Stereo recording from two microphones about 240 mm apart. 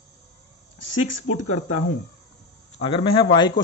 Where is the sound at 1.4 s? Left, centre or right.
Left.